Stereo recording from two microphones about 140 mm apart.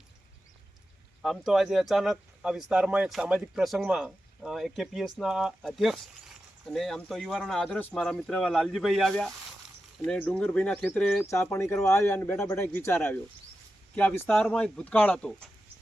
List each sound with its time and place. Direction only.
1.2 s speech: centre (ahead or behind)